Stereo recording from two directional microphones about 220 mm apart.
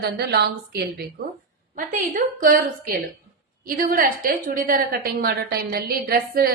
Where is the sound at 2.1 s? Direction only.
40° right (ahead or behind).